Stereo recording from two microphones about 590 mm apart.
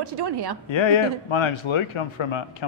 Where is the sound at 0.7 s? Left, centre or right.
Left.